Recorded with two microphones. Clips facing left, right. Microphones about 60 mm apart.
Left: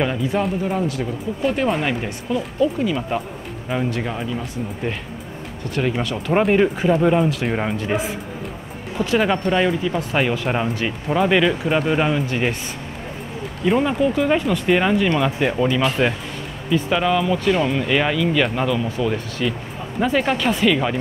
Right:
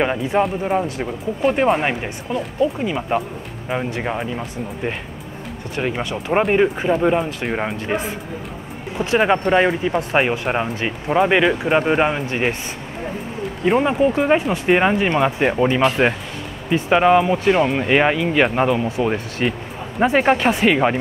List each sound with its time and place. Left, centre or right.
0.0 s speech: right
5.8 s speech: centre
9.0 s speech: right
10.3 s speech: centre
13.7 s speech: right